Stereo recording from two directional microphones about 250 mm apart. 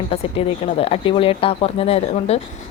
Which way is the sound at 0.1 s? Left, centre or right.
Left.